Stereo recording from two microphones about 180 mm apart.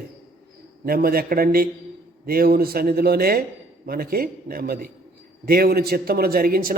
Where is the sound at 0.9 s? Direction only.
55° right (ahead or behind).